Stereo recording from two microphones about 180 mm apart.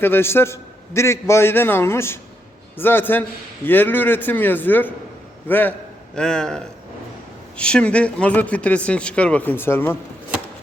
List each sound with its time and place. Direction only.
0.0 s a man's voice: 10° left (ahead or behind)